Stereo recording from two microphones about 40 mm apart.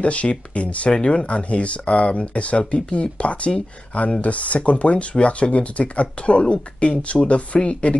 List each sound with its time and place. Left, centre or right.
0.0 s speech: left